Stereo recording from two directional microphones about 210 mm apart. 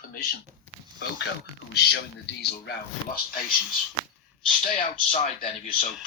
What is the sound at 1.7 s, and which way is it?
Speech, 50° left (ahead or behind).